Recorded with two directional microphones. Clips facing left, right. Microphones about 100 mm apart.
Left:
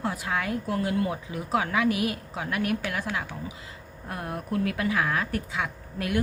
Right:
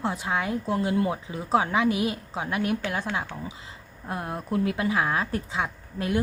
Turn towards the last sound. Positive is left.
turn(degrees=-25)  # may be behind; listen again after turning